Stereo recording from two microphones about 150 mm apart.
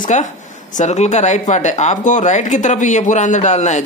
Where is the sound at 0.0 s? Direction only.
55° left (ahead or behind).